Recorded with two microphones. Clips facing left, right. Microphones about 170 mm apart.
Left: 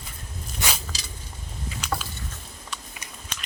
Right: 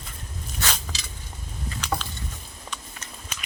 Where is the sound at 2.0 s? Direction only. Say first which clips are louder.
Right 1 dB; 5° left (ahead or behind).